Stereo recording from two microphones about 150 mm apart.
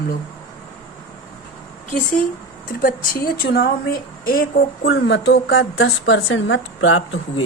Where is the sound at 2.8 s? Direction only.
70° left (ahead or behind).